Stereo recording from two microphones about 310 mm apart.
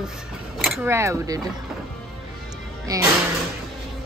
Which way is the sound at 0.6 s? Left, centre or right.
Centre.